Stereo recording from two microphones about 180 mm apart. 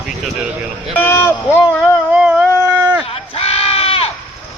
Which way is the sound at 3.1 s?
35° left (ahead or behind).